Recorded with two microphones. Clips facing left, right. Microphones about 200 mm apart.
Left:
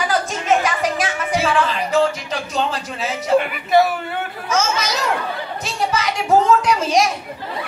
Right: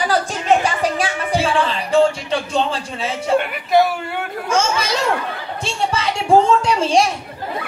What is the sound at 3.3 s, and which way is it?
Speech, centre (ahead or behind).